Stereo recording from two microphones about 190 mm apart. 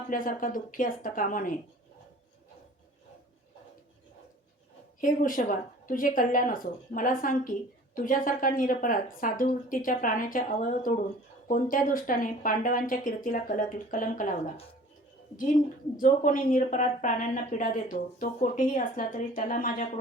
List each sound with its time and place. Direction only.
0.1 s speech: 45° left (ahead or behind)
4.9 s speech: 45° left (ahead or behind)
16.0 s speech: 45° left (ahead or behind)